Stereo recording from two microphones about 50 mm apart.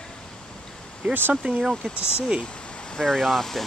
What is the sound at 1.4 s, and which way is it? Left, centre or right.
Speech, right.